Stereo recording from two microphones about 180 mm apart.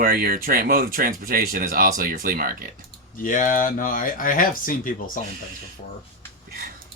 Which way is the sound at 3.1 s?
50° left (ahead or behind).